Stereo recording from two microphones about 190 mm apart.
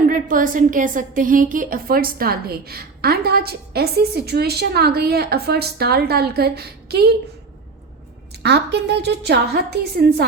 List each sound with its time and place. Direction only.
0.0 s a woman's voice: 45° right (ahead or behind)
8.4 s a woman's voice: 60° right (ahead or behind)